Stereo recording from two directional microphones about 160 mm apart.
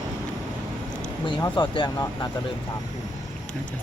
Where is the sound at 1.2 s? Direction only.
30° left (ahead or behind).